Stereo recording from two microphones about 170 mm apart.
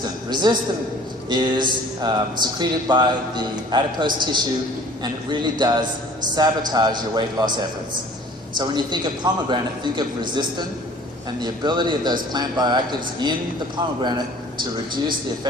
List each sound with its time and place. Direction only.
0.4 s speech: 25° right (ahead or behind)
8.5 s speech: 25° right (ahead or behind)